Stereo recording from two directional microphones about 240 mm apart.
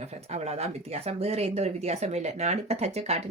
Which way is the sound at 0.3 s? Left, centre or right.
Right.